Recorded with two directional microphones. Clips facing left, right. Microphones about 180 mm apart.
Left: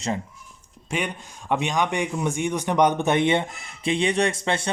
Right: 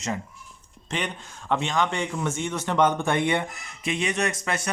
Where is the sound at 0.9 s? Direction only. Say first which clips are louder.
Left 2 dB; 10° left (ahead or behind).